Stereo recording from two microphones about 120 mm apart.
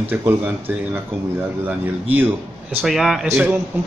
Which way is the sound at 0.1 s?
15° right (ahead or behind).